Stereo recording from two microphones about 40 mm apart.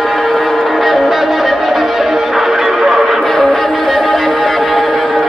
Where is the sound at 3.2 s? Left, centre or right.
Centre.